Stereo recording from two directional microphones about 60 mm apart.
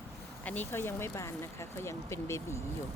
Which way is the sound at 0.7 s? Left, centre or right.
Left.